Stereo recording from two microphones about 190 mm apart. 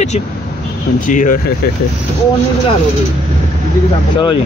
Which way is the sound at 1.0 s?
45° left (ahead or behind).